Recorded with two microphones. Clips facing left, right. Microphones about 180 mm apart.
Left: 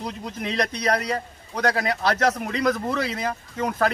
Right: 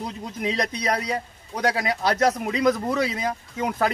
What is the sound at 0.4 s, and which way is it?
A man's voice, 10° right (ahead or behind).